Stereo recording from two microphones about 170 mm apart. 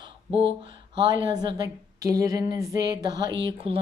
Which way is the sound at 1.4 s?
25° right (ahead or behind).